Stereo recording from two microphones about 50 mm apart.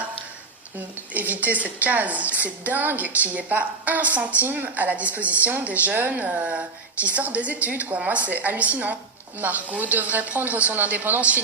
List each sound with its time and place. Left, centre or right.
1.1 s a woman's voice: right